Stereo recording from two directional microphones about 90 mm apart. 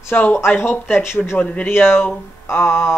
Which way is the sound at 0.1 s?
20° left (ahead or behind).